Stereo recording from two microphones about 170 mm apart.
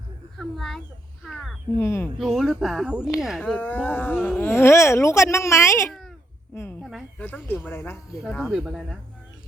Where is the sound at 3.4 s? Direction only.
10° left (ahead or behind).